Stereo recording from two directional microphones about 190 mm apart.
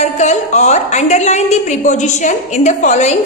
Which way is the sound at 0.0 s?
35° left (ahead or behind).